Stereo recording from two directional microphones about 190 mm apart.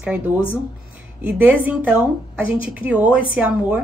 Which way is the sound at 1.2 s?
10° right (ahead or behind).